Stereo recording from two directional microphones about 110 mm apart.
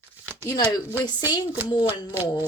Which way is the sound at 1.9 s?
15° right (ahead or behind).